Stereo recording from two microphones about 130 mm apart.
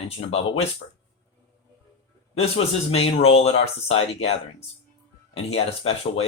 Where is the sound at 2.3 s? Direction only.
50° left (ahead or behind).